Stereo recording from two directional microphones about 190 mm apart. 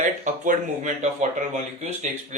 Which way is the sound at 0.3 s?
40° right (ahead or behind).